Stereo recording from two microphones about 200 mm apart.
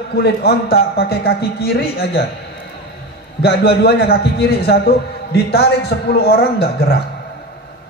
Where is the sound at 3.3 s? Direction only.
55° left (ahead or behind).